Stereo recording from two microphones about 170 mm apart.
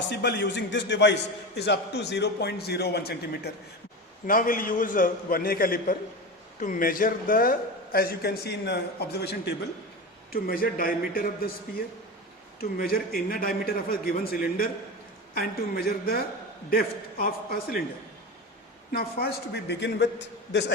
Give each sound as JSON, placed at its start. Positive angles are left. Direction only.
{"t": 0.1, "sound": "a man's voice", "side_deg": 85}
{"t": 1.5, "sound": "a man's voice", "side_deg": 80}
{"t": 4.3, "sound": "a man's voice", "side_deg": 55}
{"t": 7.9, "sound": "a man's voice", "side_deg": 65}
{"t": 10.3, "sound": "a man's voice", "side_deg": 60}
{"t": 12.7, "sound": "a man's voice", "side_deg": 60}
{"t": 18.9, "sound": "a man's voice", "side_deg": 65}